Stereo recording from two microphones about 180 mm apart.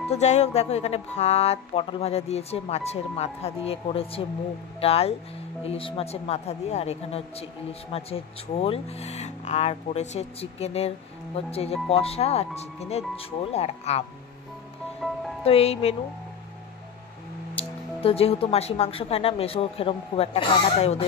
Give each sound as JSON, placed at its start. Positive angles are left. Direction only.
{"t": 0.1, "sound": "speech", "side_deg": 40}
{"t": 15.0, "sound": "music", "side_deg": 0}
{"t": 15.4, "sound": "speech", "side_deg": 35}
{"t": 17.6, "sound": "speech", "side_deg": 35}